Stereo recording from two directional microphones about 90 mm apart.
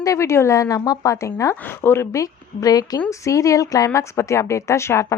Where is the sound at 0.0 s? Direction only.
35° left (ahead or behind).